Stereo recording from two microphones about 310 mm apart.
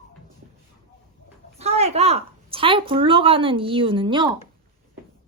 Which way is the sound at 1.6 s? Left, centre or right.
Centre.